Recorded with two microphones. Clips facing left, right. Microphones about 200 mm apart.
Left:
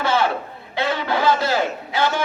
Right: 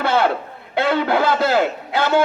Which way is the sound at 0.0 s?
60° right (ahead or behind).